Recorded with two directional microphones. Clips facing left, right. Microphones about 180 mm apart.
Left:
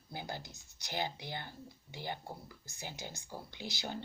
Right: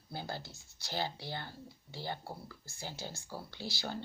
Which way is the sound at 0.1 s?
15° left (ahead or behind).